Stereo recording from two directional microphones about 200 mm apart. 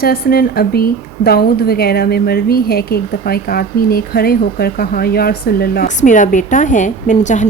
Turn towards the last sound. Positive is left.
turn(degrees=40)  # may be behind; listen again after turning